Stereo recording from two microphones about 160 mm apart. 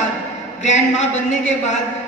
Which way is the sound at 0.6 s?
45° left (ahead or behind).